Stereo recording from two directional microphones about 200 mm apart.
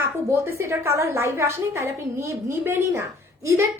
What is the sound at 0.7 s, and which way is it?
A woman's voice, 15° right (ahead or behind).